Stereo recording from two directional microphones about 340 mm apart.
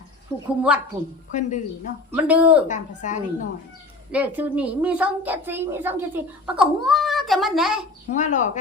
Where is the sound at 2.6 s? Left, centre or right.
Left.